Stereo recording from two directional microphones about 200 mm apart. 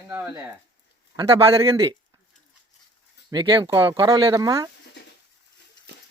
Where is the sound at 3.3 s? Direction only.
20° right (ahead or behind).